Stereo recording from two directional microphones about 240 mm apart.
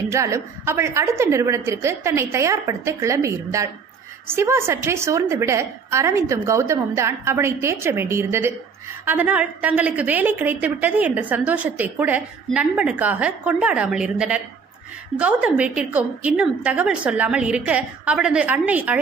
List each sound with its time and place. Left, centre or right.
0.1 s a woman's voice: centre